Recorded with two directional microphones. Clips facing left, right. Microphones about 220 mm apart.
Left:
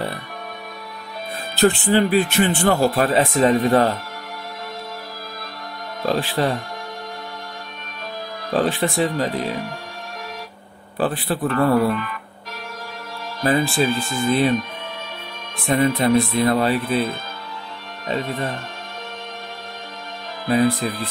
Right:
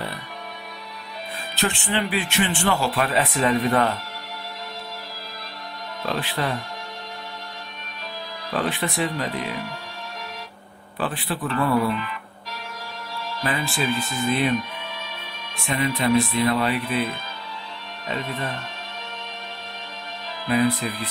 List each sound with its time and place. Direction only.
1.6 s speech: 35° left (ahead or behind)
6.0 s speech: 40° left (ahead or behind)
8.5 s speech: 30° left (ahead or behind)
11.0 s speech: 40° left (ahead or behind)
11.4 s speech: 55° left (ahead or behind)
13.4 s speech: 40° left (ahead or behind)
15.5 s speech: 50° left (ahead or behind)